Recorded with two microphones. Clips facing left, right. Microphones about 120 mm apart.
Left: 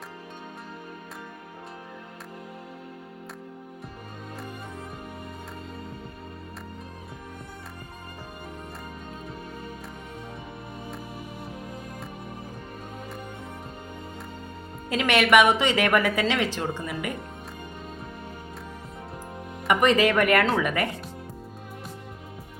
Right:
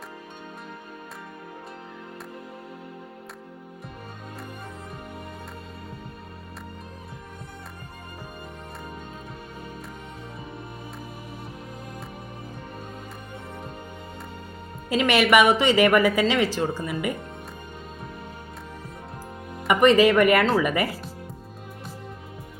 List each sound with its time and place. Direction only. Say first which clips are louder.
14.8 s a woman's voice: right 2 dB; centre (ahead or behind)
19.6 s a woman's voice: right 4 dB; centre (ahead or behind)